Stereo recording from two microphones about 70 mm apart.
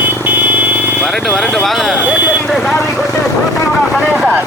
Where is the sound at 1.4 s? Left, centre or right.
Centre.